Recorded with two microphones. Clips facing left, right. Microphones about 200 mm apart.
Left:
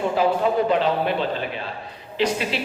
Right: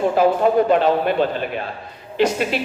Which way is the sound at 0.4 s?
50° right (ahead or behind).